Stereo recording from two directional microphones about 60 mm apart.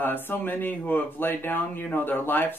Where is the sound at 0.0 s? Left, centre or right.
Left.